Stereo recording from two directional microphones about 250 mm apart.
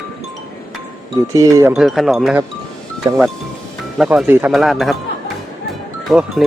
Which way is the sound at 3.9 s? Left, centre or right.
Centre.